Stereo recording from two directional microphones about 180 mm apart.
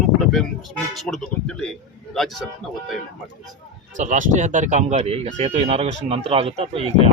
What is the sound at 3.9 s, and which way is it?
Speech, 45° right (ahead or behind).